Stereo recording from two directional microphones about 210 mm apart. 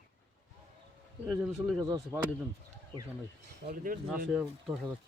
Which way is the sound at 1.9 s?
15° right (ahead or behind).